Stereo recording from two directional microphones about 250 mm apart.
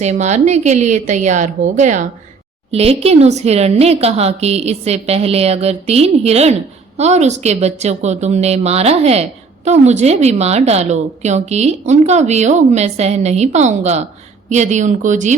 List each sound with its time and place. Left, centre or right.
0.0 s a woman's voice: right